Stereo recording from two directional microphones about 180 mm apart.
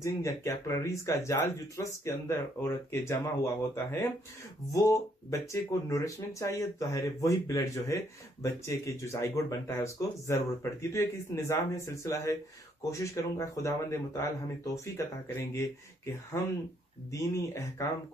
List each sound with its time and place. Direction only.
0.0 s speech: 15° left (ahead or behind)
17.1 s speech: 15° left (ahead or behind)